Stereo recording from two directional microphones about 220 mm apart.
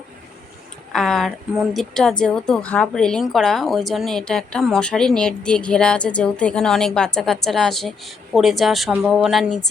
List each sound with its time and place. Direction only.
0.9 s a woman's voice: centre (ahead or behind)